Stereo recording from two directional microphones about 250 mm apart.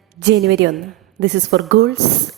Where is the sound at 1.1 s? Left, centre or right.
Right.